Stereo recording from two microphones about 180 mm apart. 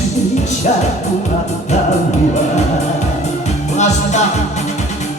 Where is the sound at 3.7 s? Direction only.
40° left (ahead or behind).